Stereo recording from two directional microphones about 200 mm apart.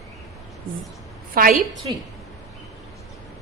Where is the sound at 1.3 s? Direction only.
45° right (ahead or behind).